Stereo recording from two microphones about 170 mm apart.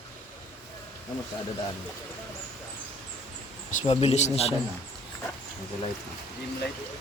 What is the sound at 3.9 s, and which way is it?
Speech, 40° left (ahead or behind).